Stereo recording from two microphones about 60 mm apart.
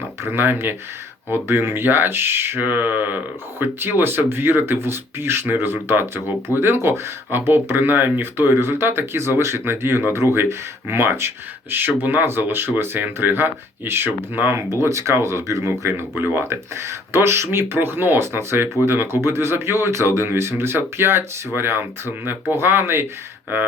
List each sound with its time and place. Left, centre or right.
0.3 s speech: right
2.6 s mantra: right
3.6 s speech: right
14.7 s speech: right